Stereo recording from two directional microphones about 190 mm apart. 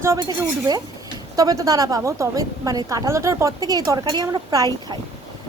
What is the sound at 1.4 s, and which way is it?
A woman's voice, 20° right (ahead or behind).